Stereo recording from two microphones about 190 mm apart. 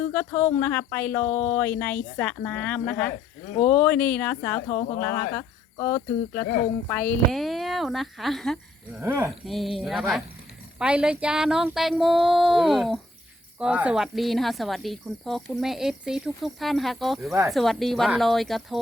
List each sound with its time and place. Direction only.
0.0 s speech: 10° left (ahead or behind)
9.0 s speech: 10° right (ahead or behind)
9.5 s speech: centre (ahead or behind)